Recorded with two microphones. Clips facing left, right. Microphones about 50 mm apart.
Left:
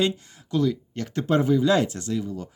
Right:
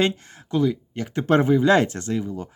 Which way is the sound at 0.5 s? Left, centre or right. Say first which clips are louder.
Right 2 dB; centre.